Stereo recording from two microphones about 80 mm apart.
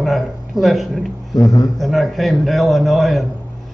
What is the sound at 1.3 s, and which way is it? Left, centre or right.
Speech, left.